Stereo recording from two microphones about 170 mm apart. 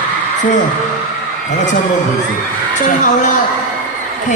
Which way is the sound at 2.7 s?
45° left (ahead or behind).